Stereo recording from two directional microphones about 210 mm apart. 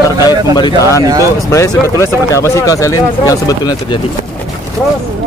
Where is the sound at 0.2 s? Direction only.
20° left (ahead or behind).